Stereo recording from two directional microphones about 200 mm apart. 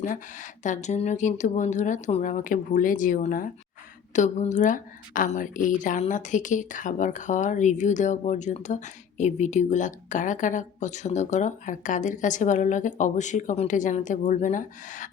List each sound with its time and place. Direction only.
0.0 s a woman's voice: 40° left (ahead or behind)